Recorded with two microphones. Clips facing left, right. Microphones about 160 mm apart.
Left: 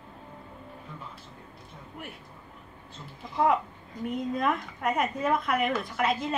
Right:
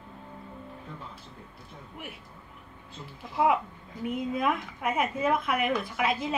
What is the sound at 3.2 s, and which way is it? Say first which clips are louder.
Speech: even; 5° right (ahead or behind).